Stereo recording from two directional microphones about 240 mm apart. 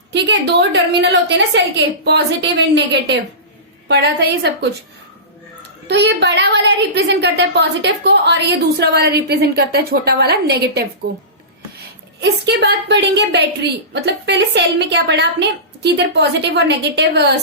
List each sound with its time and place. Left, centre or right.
0.1 s a woman's voice: right
5.9 s a woman's voice: right
12.2 s a woman's voice: right